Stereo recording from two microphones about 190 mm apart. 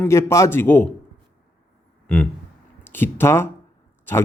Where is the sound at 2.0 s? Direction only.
5° left (ahead or behind).